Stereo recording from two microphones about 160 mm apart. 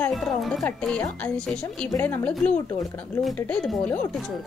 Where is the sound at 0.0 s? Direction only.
Centre (ahead or behind).